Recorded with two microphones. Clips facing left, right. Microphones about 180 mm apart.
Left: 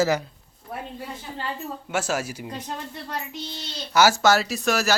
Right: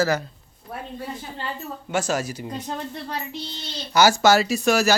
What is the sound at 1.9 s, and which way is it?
Speech, 5° left (ahead or behind).